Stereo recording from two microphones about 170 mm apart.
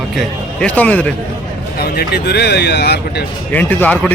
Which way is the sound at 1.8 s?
65° left (ahead or behind).